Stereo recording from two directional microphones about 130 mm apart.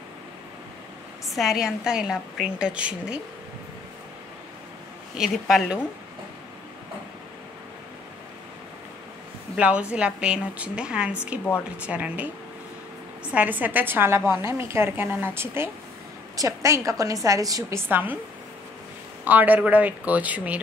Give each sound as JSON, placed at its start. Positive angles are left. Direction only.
{"t": 1.2, "sound": "a woman's voice", "side_deg": 0}
{"t": 5.1, "sound": "a woman's voice", "side_deg": 0}
{"t": 9.6, "sound": "a woman's voice", "side_deg": -10}
{"t": 17.8, "sound": "a woman's voice", "side_deg": -15}
{"t": 19.2, "sound": "a woman's voice", "side_deg": -15}